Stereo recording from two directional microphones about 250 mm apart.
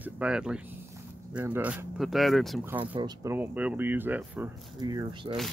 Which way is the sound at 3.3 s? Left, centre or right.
Centre.